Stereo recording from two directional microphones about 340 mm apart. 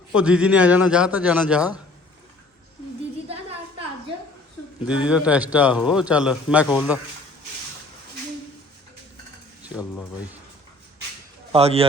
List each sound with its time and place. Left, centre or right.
0.1 s a man's voice: centre
4.9 s a man's voice: centre
11.5 s speech: centre